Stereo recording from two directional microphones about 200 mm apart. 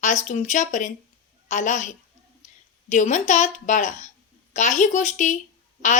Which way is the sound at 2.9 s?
35° left (ahead or behind).